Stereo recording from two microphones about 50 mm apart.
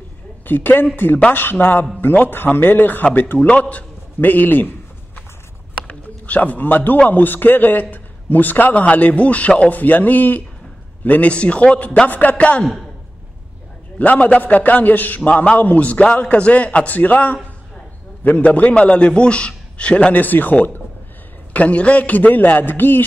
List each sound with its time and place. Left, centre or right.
0.5 s a man's voice: left
3.3 s a sound: left
7.1 s a man's voice: left
13.9 s a man's voice: left
20.1 s a man's voice: left